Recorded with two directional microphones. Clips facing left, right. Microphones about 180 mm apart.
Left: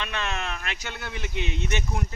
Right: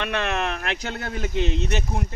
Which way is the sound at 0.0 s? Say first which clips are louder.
Right 6 dB; 60° right (ahead or behind).